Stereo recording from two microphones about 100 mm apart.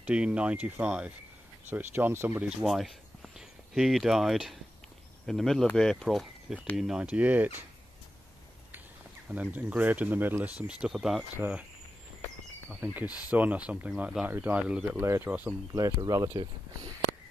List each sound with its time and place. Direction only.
0.0 s speech: 10° right (ahead or behind)
2.6 s speech: centre (ahead or behind)
6.8 s speech: 10° right (ahead or behind)
9.3 s speech: 15° right (ahead or behind)
10.7 s speech: 5° right (ahead or behind)
11.3 s speech: 20° right (ahead or behind)
12.6 s speech: 20° right (ahead or behind)
15.0 s speech: 25° right (ahead or behind)
15.7 s speech: 35° right (ahead or behind)